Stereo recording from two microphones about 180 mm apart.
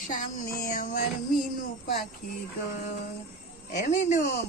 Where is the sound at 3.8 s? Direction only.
40° left (ahead or behind).